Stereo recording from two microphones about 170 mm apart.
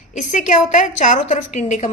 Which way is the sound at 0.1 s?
45° left (ahead or behind).